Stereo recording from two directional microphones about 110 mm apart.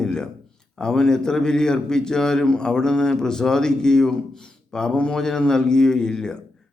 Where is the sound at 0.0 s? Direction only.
5° left (ahead or behind).